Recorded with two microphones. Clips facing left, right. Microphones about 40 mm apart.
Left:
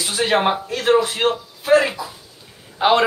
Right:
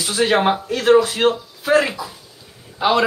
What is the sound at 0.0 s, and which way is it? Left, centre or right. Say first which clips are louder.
Speech: right 1 dB; left.